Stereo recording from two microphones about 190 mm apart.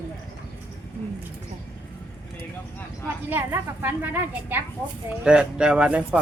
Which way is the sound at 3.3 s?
10° right (ahead or behind).